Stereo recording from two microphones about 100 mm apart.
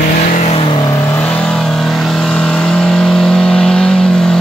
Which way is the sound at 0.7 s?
35° left (ahead or behind).